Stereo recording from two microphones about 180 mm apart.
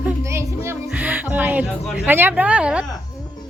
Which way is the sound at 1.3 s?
10° right (ahead or behind).